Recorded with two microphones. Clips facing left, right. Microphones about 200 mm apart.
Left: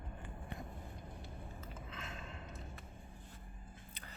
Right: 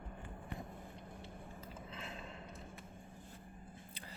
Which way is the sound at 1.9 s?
35° right (ahead or behind).